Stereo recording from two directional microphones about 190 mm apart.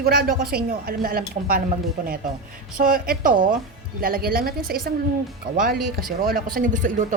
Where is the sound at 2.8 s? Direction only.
45° right (ahead or behind).